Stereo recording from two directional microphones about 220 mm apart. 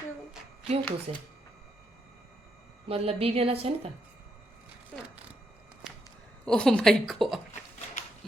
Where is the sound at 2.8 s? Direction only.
25° right (ahead or behind).